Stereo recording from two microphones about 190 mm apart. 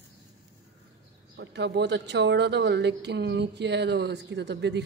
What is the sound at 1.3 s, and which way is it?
Speech, 65° right (ahead or behind).